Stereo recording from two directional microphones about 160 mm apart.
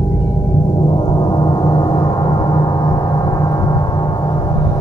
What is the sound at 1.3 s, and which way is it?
Gong, 25° left (ahead or behind).